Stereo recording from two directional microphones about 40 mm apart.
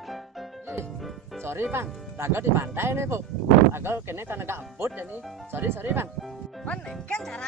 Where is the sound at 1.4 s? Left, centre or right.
Right.